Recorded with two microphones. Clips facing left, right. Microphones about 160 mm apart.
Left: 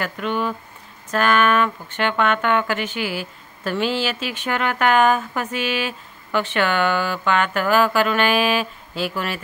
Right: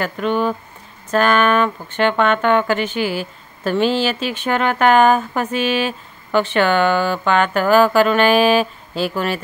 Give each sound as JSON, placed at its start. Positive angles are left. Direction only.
{"t": 0.0, "sound": "speech", "side_deg": -35}